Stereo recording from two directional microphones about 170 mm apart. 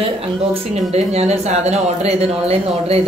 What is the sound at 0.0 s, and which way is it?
Speech, 35° right (ahead or behind).